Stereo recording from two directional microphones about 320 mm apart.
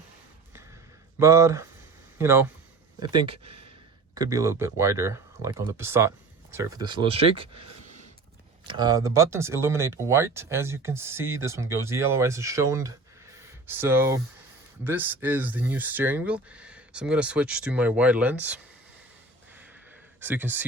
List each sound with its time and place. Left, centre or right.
1.2 s speech: centre
8.6 s speech: centre
13.4 s a sound: centre
14.8 s speech: centre
20.2 s speech: centre